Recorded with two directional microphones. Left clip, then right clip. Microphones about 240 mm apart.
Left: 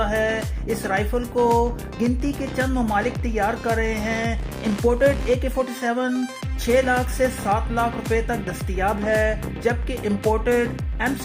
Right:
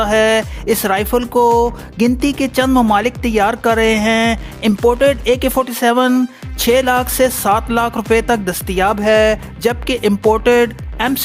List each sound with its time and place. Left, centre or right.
0.0 s speech: right